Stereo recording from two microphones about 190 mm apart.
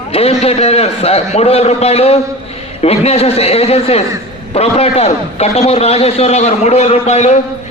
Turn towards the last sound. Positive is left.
turn(degrees=35)  # may be behind; listen again after turning